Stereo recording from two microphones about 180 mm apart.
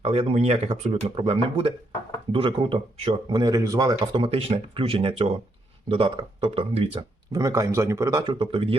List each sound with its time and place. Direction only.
0.0 s speech: 35° right (ahead or behind)
7.4 s speech: 20° right (ahead or behind)